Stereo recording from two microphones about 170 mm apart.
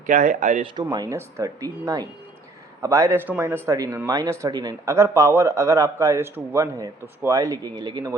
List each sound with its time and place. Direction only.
0.0 s speech: 45° right (ahead or behind)
0.6 s speech: 25° right (ahead or behind)